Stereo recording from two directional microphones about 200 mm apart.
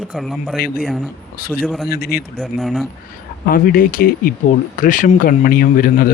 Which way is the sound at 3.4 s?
45° left (ahead or behind).